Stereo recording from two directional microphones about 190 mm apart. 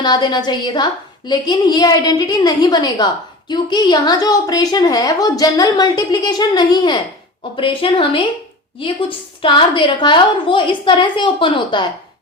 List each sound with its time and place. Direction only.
0.0 s a woman's voice: 20° left (ahead or behind)